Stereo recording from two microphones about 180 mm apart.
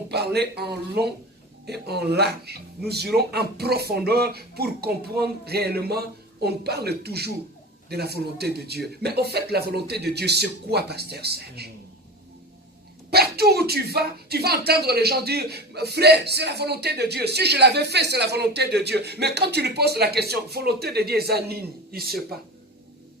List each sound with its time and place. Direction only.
0.1 s speech: 65° right (ahead or behind)
13.1 s speech: 60° right (ahead or behind)